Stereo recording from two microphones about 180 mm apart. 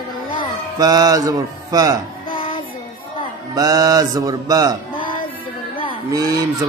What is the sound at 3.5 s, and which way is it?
Speech, 20° right (ahead or behind).